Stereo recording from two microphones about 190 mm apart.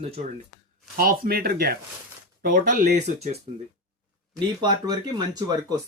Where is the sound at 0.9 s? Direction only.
50° right (ahead or behind).